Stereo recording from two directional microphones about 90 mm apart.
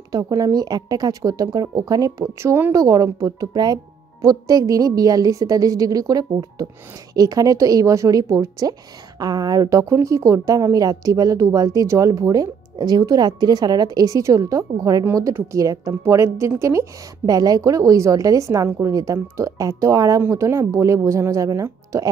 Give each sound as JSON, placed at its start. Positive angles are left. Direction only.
{"t": 0.1, "sound": "speech", "side_deg": -40}
{"t": 2.7, "sound": "a woman's voice", "side_deg": -40}
{"t": 17.3, "sound": "a woman's voice", "side_deg": -45}